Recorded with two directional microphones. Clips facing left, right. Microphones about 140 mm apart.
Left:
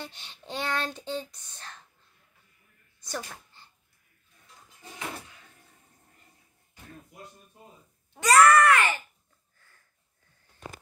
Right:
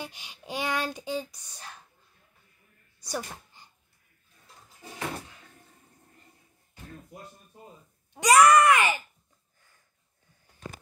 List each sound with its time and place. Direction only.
0.0 s child singing: 10° right (ahead or behind)
3.0 s a sound: 10° right (ahead or behind)
8.1 s child singing: 15° right (ahead or behind)
9.6 s sniff: 15° right (ahead or behind)